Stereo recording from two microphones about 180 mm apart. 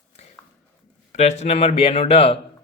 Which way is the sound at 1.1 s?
40° left (ahead or behind).